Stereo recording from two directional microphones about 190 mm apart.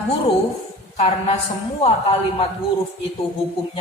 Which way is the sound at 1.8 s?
30° left (ahead or behind).